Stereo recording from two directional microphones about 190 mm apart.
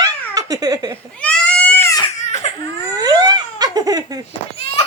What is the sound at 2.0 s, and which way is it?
Baby cry, 35° left (ahead or behind).